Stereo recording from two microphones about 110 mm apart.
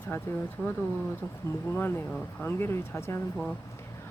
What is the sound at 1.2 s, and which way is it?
Speech, 20° left (ahead or behind).